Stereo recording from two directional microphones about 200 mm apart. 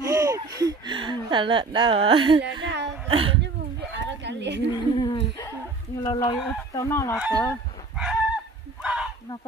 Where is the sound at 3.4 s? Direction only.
60° right (ahead or behind).